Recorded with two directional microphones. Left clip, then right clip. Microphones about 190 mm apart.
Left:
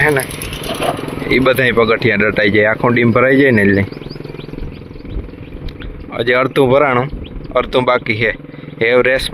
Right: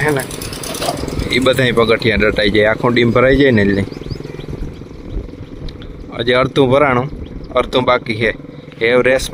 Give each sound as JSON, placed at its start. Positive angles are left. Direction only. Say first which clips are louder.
{"t": 0.0, "sound": "speech", "louder": "left 3 dB", "side_deg": -10}
{"t": 0.3, "sound": "vehicle", "louder": "left 2 dB", "side_deg": -45}
{"t": 1.3, "sound": "speech", "louder": "left 2 dB", "side_deg": -5}
{"t": 6.1, "sound": "speech", "louder": "even", "side_deg": -5}